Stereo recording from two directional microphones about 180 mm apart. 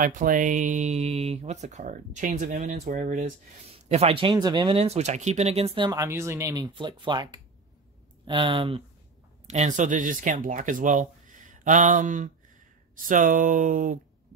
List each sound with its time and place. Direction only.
0.0 s speech: 50° right (ahead or behind)
3.9 s speech: 30° right (ahead or behind)
5.9 s speech: 15° right (ahead or behind)
9.5 s speech: 40° right (ahead or behind)